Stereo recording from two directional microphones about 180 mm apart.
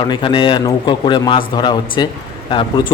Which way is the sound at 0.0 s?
25° left (ahead or behind).